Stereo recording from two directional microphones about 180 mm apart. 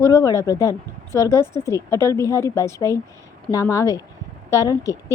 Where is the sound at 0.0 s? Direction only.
20° left (ahead or behind).